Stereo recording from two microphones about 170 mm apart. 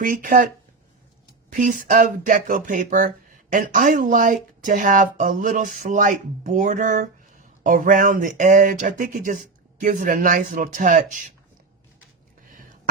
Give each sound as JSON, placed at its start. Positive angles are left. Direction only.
{"t": 0.0, "sound": "speech", "side_deg": -50}